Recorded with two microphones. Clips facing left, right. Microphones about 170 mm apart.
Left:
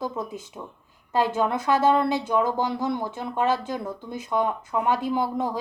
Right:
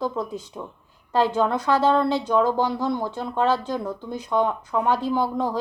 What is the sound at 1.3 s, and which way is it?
Speech, 15° left (ahead or behind).